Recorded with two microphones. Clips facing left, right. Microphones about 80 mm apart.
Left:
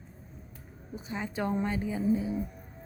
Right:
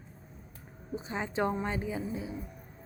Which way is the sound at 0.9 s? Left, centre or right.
Right.